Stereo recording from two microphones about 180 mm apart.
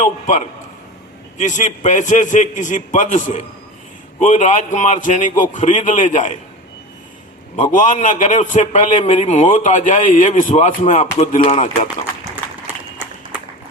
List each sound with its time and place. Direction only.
0.0 s a man's voice: 40° left (ahead or behind)
7.5 s a man's voice: 45° left (ahead or behind)